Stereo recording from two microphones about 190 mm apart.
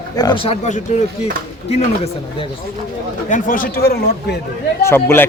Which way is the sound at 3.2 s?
45° left (ahead or behind).